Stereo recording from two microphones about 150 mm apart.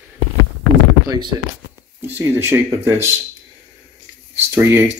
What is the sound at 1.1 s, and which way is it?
Speech, 30° right (ahead or behind).